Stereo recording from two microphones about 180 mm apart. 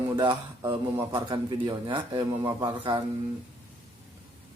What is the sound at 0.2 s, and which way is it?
A man's voice, 25° right (ahead or behind).